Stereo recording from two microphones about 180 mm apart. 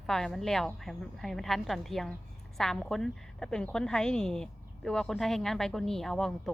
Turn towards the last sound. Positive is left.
turn(degrees=0)  # may be behind; listen again after turning